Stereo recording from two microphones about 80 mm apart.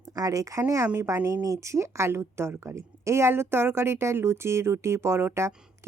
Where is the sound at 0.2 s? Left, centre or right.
Right.